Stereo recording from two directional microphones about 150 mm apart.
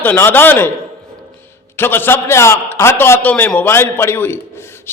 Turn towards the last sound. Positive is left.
turn(degrees=15)  # may be behind; listen again after turning